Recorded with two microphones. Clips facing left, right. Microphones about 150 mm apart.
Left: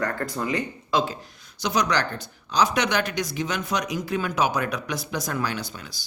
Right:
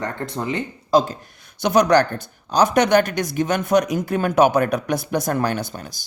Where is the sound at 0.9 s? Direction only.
45° right (ahead or behind).